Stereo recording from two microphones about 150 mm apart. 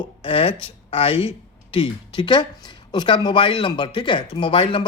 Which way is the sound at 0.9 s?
40° left (ahead or behind).